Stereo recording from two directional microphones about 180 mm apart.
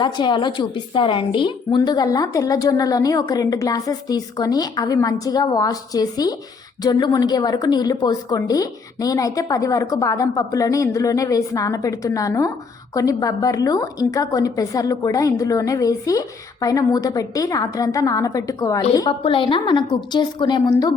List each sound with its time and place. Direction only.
0.0 s a woman's voice: 25° left (ahead or behind)